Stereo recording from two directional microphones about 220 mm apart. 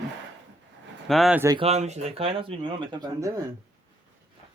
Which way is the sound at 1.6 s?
30° right (ahead or behind).